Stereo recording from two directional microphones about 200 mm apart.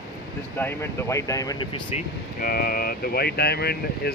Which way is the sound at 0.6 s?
10° left (ahead or behind).